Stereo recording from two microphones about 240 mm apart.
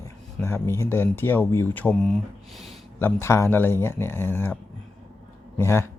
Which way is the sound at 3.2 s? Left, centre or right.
Centre.